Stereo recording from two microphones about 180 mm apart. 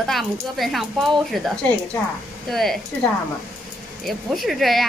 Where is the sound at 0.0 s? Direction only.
Centre (ahead or behind).